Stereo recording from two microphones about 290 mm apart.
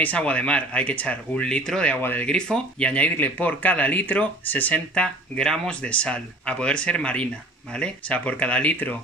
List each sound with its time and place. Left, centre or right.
0.0 s speech: centre